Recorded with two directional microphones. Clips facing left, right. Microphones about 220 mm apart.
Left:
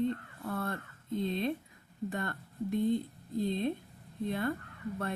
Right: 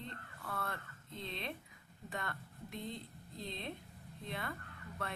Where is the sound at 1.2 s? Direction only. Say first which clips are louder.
Left 10 dB; 45° left (ahead or behind).